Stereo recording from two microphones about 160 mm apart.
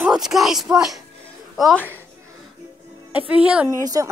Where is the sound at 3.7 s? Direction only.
20° right (ahead or behind).